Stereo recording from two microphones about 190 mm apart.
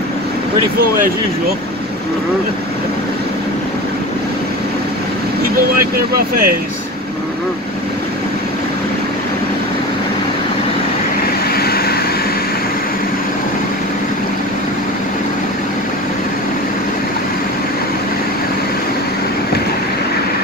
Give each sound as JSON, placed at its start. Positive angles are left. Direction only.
{"t": 5.9, "sound": "speech", "side_deg": -50}
{"t": 11.5, "sound": "vehicle", "side_deg": 55}